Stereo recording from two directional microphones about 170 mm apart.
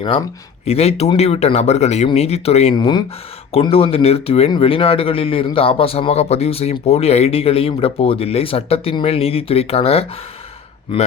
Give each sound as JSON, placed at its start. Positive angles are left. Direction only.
{"t": 0.0, "sound": "a man's voice", "side_deg": 30}
{"t": 2.7, "sound": "a man's voice", "side_deg": 25}